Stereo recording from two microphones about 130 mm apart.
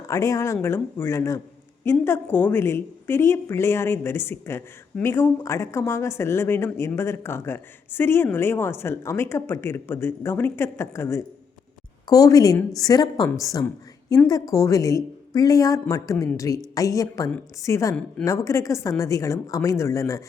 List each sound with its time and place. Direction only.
0.1 s a woman's voice: 25° left (ahead or behind)